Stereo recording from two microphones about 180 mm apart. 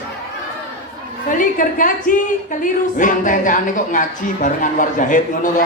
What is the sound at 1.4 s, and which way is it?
Speech, 50° left (ahead or behind).